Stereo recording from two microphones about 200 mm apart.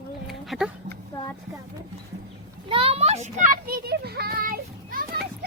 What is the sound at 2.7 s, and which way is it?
Child singing, 30° right (ahead or behind).